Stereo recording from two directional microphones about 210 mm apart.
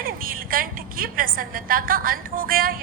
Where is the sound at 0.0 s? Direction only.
45° right (ahead or behind).